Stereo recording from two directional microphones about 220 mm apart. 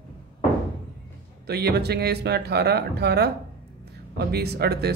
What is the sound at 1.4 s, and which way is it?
Speech, 45° right (ahead or behind).